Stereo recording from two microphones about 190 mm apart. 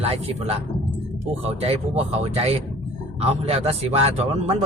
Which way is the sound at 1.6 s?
30° right (ahead or behind).